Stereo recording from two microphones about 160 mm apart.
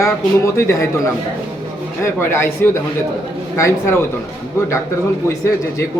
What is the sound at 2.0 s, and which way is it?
Speech, 15° left (ahead or behind).